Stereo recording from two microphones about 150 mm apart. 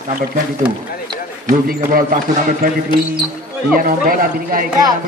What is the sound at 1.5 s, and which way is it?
Speech, 70° right (ahead or behind).